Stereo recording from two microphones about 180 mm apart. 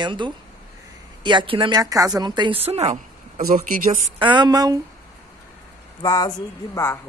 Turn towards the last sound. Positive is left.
turn(degrees=20)  # may be behind; listen again after turning